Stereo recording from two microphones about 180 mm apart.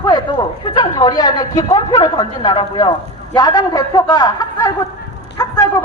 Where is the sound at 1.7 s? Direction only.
20° left (ahead or behind).